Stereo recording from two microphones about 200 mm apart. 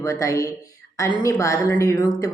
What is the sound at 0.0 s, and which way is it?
A woman's voice, 15° left (ahead or behind).